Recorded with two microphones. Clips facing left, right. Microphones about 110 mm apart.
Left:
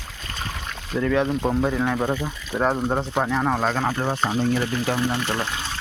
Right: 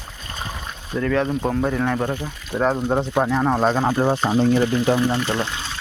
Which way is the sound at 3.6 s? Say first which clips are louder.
Right 5 dB; 15° right (ahead or behind).